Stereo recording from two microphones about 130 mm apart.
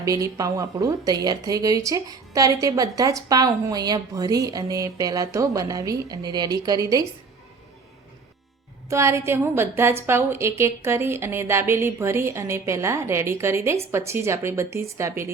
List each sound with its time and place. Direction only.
0.0 s speech: 25° right (ahead or behind)
8.9 s speech: 20° right (ahead or behind)